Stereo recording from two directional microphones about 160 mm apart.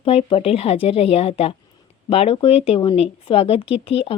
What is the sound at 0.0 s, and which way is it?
A woman's voice, 35° left (ahead or behind).